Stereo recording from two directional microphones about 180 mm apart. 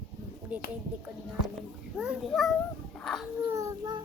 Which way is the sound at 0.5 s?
5° right (ahead or behind).